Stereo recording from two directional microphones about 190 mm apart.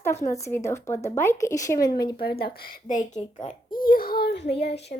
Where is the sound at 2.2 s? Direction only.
55° left (ahead or behind).